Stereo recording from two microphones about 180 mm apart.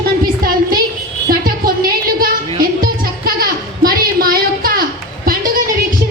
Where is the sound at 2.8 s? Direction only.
55° right (ahead or behind).